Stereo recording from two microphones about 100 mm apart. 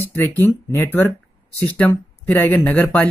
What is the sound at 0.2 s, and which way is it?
Speech, 25° left (ahead or behind).